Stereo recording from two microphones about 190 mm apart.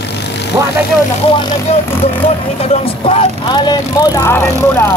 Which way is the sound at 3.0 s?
25° left (ahead or behind).